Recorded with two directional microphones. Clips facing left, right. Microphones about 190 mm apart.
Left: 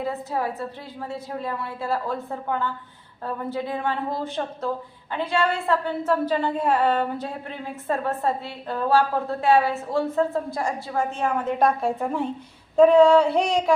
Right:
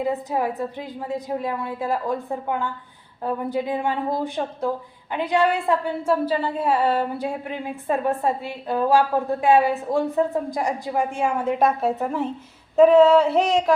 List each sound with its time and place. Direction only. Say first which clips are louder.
0.0 s a woman's voice: right 3 dB; 15° right (ahead or behind)
12.7 s female singing: right 1 dB; 5° right (ahead or behind)